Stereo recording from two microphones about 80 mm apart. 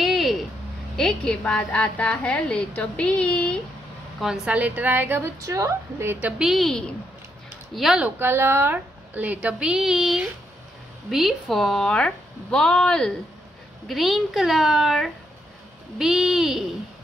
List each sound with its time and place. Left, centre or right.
0.0 s a sound: centre
0.9 s a woman's voice: centre
4.2 s a woman's voice: centre
5.4 s a woman's voice: right
6.2 s a child's voice: centre
8.2 s a woman's voice: right
8.7 s a woman's voice: centre
13.8 s a child's voice: centre